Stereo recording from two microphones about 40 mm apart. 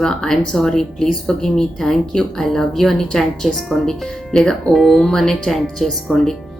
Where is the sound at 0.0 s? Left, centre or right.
Centre.